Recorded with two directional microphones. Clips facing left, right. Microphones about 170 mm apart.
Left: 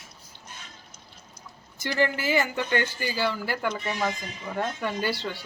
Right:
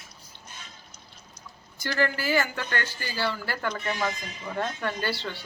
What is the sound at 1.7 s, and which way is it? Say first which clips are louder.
Speech: left 2 dB; 20° left (ahead or behind).